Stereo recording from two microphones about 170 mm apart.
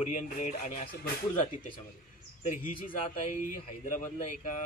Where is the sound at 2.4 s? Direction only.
50° left (ahead or behind).